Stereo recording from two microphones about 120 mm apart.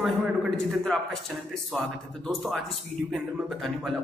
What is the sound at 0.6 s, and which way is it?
Speech, centre (ahead or behind).